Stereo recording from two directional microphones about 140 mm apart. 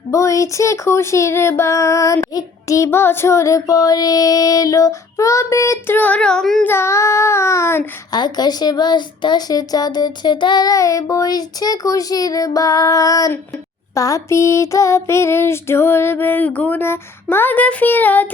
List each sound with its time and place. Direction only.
0.1 s speech: 20° left (ahead or behind); by 6.7 s 5° left (ahead or behind)
6.7 s speech: 20° left (ahead or behind)
8.1 s speech: 30° left (ahead or behind)
13.9 s a sound: 25° left (ahead or behind)